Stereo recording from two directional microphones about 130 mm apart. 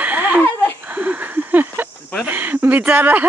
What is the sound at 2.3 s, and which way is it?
Speech, 15° right (ahead or behind).